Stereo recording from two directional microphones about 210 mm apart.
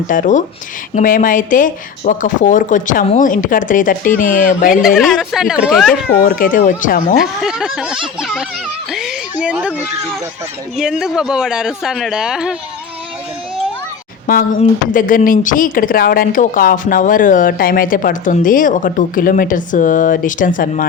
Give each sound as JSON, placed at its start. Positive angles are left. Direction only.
{"t": 0.1, "sound": "speech", "side_deg": 40}
{"t": 4.9, "sound": "speech", "side_deg": 0}
{"t": 6.2, "sound": "speech", "side_deg": 40}
{"t": 7.2, "sound": "speech", "side_deg": -5}
{"t": 8.9, "sound": "a sound", "side_deg": 0}
{"t": 10.8, "sound": "speech", "side_deg": -5}
{"t": 14.3, "sound": "speech", "side_deg": 40}